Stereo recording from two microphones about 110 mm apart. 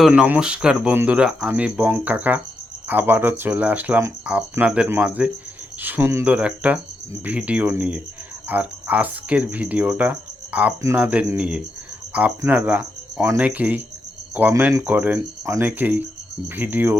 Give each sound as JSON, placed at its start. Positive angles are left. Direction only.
{"t": 0.1, "sound": "speech", "side_deg": -10}
{"t": 6.2, "sound": "speech", "side_deg": -10}
{"t": 8.4, "sound": "cricket", "side_deg": -15}
{"t": 10.9, "sound": "speech", "side_deg": -15}
{"t": 12.4, "sound": "speech", "side_deg": -20}